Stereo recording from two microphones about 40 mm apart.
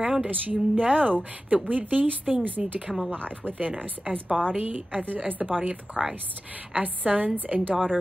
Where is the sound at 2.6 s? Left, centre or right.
Centre.